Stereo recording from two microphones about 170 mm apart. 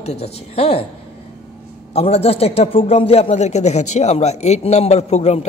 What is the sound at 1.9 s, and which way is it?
Speech, 35° left (ahead or behind).